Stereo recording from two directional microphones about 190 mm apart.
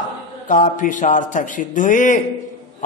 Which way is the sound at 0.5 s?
40° left (ahead or behind).